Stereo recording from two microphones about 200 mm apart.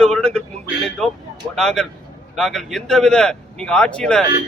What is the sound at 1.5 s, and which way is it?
A man's voice, centre (ahead or behind).